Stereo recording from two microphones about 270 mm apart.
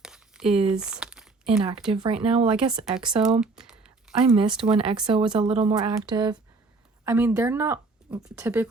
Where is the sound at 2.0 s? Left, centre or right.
Centre.